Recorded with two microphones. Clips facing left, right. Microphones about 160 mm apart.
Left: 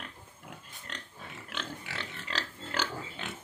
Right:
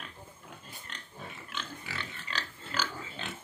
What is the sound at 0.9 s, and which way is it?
Pig, 80° left.